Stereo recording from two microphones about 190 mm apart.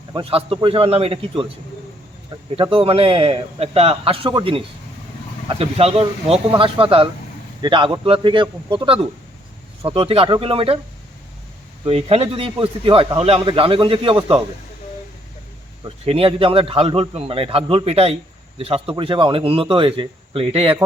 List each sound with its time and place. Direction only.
0.1 s a man's voice: 30° right (ahead or behind)
2.6 s a man's voice: 30° right (ahead or behind)
11.9 s a man's voice: 30° right (ahead or behind)
15.8 s a man's voice: 30° right (ahead or behind)